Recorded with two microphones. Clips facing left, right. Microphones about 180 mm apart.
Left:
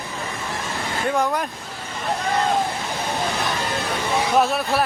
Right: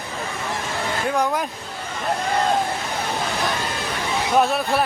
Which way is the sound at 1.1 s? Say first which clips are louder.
Left 1 dB; centre (ahead or behind).